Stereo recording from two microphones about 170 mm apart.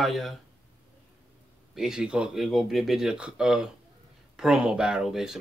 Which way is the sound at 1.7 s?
5° right (ahead or behind).